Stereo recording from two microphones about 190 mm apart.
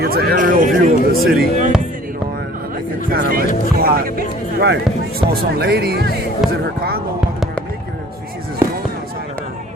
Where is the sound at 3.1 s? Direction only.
50° right (ahead or behind).